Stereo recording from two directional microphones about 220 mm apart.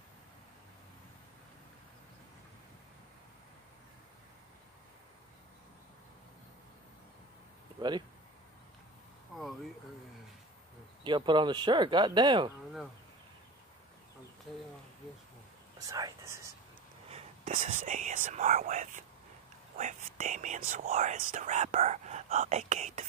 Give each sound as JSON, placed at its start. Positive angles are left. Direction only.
{"t": 7.8, "sound": "a sound", "side_deg": -20}
{"t": 11.1, "sound": "speech", "side_deg": -20}
{"t": 15.9, "sound": "speech", "side_deg": -15}
{"t": 17.1, "sound": "speech", "side_deg": -30}